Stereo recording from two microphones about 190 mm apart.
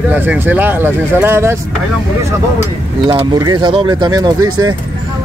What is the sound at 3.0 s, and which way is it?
Speech, 25° right (ahead or behind).